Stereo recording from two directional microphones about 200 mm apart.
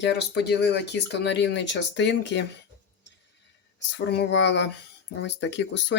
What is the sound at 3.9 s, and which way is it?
Speech, 60° left (ahead or behind).